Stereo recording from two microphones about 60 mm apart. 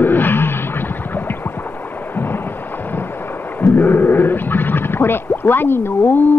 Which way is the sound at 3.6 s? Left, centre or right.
Left.